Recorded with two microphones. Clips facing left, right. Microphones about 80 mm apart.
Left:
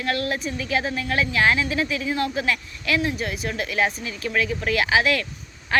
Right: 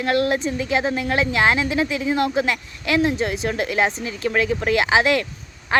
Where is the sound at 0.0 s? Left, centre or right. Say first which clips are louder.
Right 6 dB; right.